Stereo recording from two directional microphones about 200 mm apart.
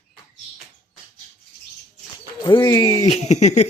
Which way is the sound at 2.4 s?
20° left (ahead or behind).